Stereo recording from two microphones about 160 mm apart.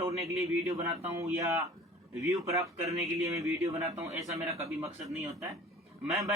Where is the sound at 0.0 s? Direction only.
20° right (ahead or behind).